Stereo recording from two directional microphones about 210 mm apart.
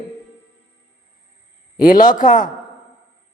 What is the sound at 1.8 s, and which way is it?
Speech, 40° left (ahead or behind).